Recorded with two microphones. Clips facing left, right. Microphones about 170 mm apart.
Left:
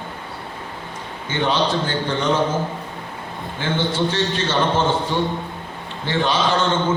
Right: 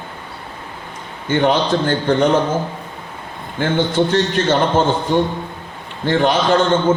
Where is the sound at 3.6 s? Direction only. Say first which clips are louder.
Right 5 dB; 55° right (ahead or behind).